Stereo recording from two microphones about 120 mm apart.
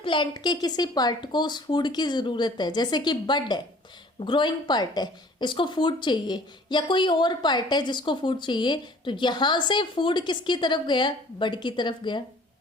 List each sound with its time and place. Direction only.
0.0 s speech: 40° left (ahead or behind)